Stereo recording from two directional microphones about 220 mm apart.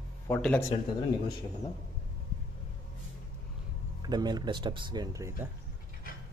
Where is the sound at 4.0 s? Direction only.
20° right (ahead or behind).